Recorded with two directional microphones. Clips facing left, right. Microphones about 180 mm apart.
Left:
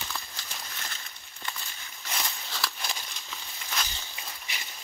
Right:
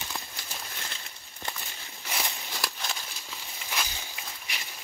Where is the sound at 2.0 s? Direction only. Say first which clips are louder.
Right 1 dB; 10° right (ahead or behind).